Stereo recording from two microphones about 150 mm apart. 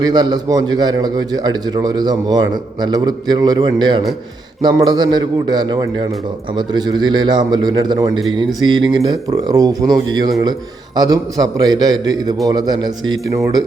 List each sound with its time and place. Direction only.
0.0 s a man's voice: 30° right (ahead or behind)